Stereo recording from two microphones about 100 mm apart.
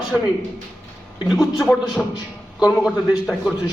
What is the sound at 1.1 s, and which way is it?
Speech, 5° right (ahead or behind).